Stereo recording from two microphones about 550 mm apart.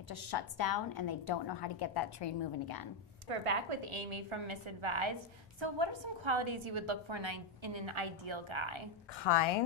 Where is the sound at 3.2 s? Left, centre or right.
Right.